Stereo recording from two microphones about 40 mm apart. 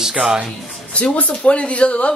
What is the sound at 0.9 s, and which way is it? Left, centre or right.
Speech, left.